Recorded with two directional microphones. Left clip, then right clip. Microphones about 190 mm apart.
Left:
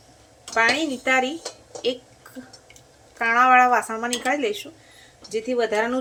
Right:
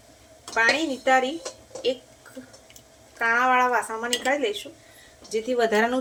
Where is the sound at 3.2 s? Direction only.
25° left (ahead or behind).